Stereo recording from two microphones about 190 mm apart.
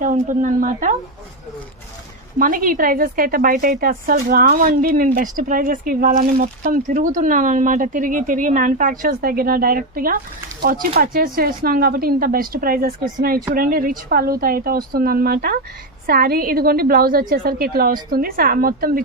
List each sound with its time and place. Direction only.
0.0 s speech: 40° right (ahead or behind)
2.3 s speech: 45° right (ahead or behind)